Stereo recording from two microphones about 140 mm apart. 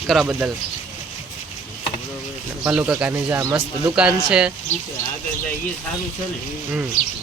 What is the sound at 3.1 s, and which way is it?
Speech, 25° right (ahead or behind).